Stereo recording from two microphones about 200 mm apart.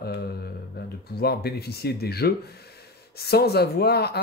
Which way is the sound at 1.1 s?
50° left (ahead or behind).